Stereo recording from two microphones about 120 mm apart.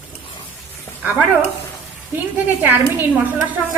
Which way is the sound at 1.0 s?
10° right (ahead or behind).